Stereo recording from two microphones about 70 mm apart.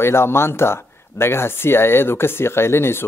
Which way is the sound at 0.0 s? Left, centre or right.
Left.